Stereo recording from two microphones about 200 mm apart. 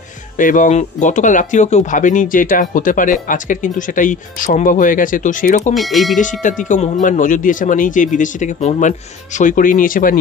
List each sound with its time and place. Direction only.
0.4 s speech: 40° left (ahead or behind)
5.8 s speech: centre (ahead or behind)
6.4 s speech: 40° left (ahead or behind)